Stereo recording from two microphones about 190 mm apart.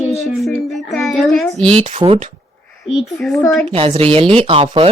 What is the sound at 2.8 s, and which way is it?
Speech, centre (ahead or behind).